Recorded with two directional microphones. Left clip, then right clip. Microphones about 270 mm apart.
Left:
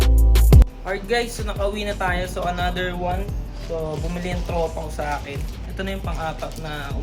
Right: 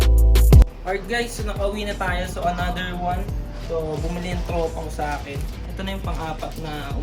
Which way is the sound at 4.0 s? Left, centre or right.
Centre.